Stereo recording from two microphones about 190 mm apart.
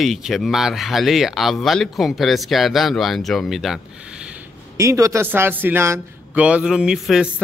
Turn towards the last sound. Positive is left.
turn(degrees=-5)  # may be behind; listen again after turning